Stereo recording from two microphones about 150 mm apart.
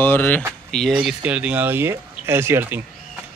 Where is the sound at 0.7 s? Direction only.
5° left (ahead or behind).